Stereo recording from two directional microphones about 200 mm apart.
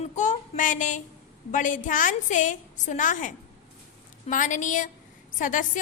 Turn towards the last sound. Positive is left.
turn(degrees=40)  # may be behind; listen again after turning